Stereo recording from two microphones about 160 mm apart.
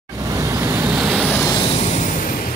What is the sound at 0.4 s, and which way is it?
Waves, 15° right (ahead or behind).